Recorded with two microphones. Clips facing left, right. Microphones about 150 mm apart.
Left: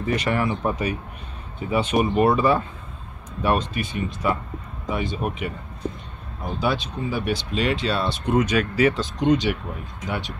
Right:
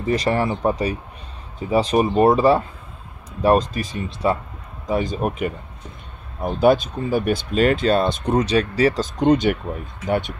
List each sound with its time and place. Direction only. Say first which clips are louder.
0.0 s speech: right 3 dB; 35° right (ahead or behind)
6.4 s speech: right 9 dB; 50° right (ahead or behind)